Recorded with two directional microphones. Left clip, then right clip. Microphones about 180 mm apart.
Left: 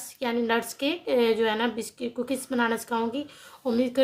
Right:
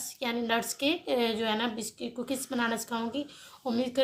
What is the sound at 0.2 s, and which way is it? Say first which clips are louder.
A woman's voice: left 4 dB; 35° left (ahead or behind).